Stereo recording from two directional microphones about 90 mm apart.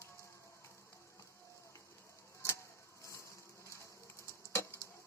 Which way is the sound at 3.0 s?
35° left (ahead or behind).